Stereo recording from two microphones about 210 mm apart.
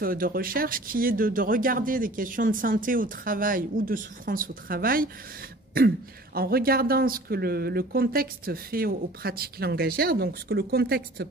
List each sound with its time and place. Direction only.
0.0 s speech: 45° right (ahead or behind)
6.3 s speech: 45° right (ahead or behind)